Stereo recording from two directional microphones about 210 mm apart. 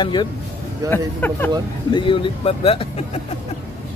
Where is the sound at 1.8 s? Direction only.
25° left (ahead or behind).